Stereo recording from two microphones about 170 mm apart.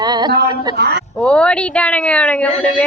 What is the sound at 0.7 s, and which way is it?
Speech, 75° right (ahead or behind).